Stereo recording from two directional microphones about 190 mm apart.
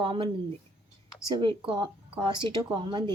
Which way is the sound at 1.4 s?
25° right (ahead or behind).